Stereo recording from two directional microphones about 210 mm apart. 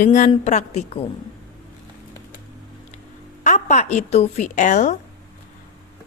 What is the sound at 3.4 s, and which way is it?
Speech, 35° left (ahead or behind).